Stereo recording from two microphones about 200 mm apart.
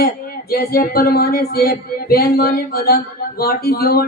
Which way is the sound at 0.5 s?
50° left (ahead or behind).